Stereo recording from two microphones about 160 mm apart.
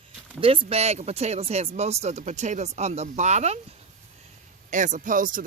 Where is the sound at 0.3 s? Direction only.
35° right (ahead or behind).